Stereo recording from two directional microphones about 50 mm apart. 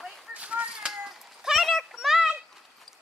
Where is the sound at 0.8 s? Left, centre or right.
Centre.